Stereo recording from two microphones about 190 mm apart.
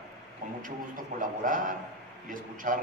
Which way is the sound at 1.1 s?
45° right (ahead or behind).